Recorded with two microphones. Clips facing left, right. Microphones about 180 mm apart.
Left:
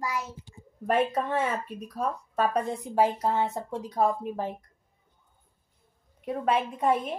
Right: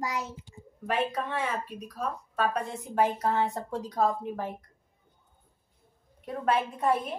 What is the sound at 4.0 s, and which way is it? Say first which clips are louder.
Speech: left 2 dB; 20° left (ahead or behind).